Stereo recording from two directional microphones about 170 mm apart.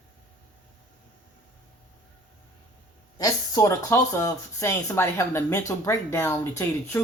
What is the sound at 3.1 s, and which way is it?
Speech, 20° left (ahead or behind).